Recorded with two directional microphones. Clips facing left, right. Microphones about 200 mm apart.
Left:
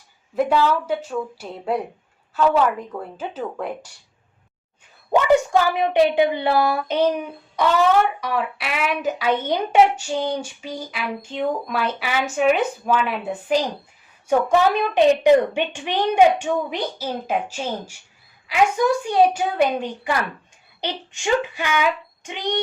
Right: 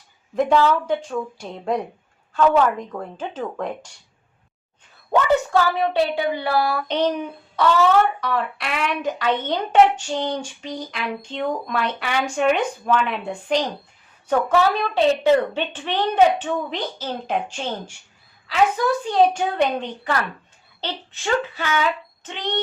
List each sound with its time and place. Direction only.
0.3 s speech: 10° left (ahead or behind)
5.1 s speech: 15° left (ahead or behind)
6.8 s speech: 10° left (ahead or behind)